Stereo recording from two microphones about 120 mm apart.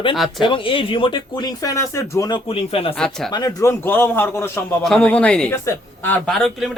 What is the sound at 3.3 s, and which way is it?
A man's voice, 30° left (ahead or behind).